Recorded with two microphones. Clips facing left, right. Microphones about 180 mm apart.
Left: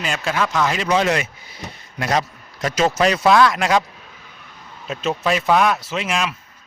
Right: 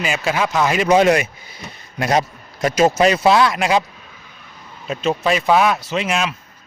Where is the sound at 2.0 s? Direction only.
30° right (ahead or behind).